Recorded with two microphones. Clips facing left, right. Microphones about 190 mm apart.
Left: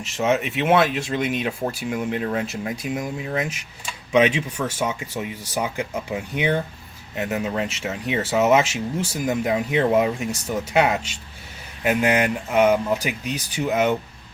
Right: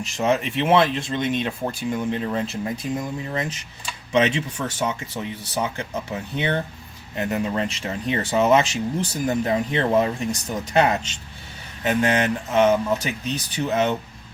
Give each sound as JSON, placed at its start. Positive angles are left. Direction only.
{"t": 0.0, "sound": "speech", "side_deg": 0}